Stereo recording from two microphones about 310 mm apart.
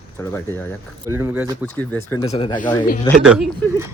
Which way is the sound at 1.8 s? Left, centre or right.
Centre.